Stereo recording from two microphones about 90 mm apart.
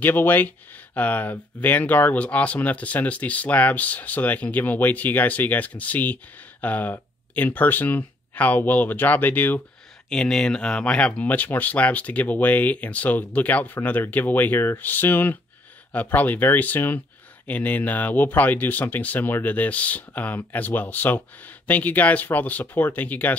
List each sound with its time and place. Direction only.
0.0 s speech: 20° left (ahead or behind)
10.0 s speech: 10° left (ahead or behind)